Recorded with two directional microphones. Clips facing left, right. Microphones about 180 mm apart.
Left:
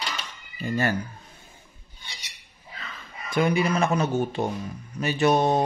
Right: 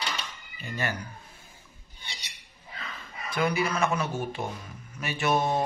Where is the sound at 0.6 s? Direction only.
45° left (ahead or behind).